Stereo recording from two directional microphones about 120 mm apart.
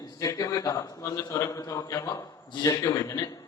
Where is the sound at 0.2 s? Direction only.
30° left (ahead or behind).